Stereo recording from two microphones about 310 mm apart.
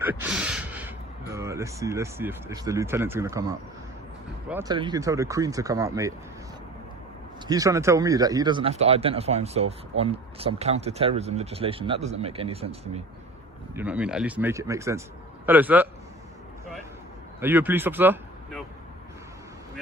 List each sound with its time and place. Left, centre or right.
0.1 s speech: centre
7.4 s speech: centre
13.7 s a man's voice: centre
17.4 s a man's voice: centre